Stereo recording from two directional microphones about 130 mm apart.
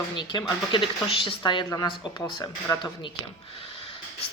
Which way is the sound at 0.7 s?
40° left (ahead or behind).